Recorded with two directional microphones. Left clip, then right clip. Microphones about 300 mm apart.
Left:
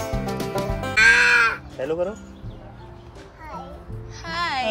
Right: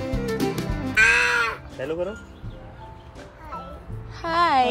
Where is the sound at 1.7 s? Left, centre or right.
Left.